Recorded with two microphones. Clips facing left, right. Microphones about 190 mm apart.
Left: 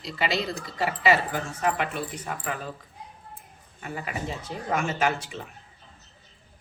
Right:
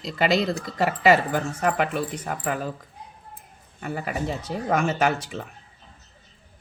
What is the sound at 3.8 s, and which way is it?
Speech, 45° right (ahead or behind).